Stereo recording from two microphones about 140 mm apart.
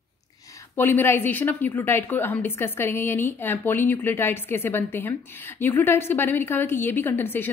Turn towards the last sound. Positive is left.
turn(degrees=15)  # may be behind; listen again after turning